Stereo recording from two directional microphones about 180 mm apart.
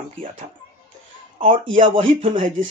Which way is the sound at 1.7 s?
30° right (ahead or behind).